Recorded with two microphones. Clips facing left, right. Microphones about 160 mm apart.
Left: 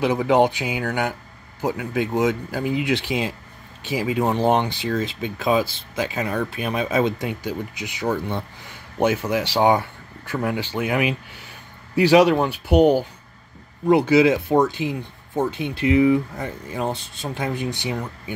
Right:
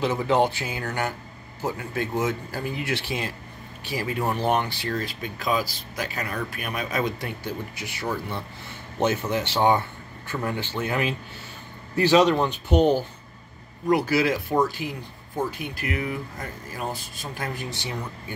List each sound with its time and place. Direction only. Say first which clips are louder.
0.0 s speech: left 4 dB; 15° left (ahead or behind)